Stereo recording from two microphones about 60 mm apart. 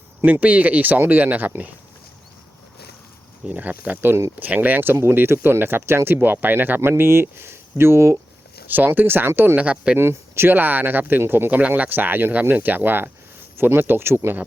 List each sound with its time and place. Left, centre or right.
0.3 s speech: right
3.5 s speech: right
8.6 s speech: right
9.6 s speech: right
10.0 s speech: right